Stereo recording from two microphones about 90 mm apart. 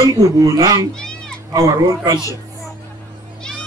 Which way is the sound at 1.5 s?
40° right (ahead or behind).